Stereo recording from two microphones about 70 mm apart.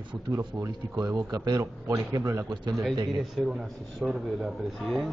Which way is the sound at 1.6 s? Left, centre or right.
Right.